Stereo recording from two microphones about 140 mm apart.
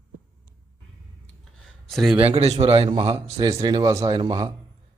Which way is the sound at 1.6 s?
Centre (ahead or behind).